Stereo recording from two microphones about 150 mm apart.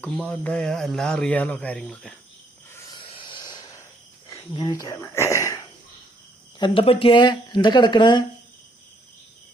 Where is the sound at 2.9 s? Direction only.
35° left (ahead or behind).